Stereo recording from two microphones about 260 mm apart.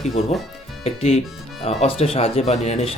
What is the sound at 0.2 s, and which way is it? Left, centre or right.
Speech, left.